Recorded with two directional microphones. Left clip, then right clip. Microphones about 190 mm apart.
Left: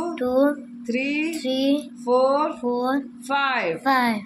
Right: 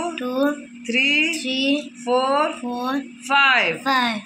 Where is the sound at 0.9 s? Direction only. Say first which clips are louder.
Right 7 dB; centre (ahead or behind).